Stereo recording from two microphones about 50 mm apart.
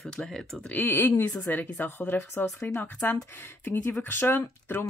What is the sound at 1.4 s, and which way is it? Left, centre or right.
Speech, left.